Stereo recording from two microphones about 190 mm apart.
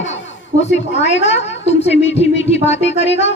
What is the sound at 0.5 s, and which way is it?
Speech, 45° right (ahead or behind).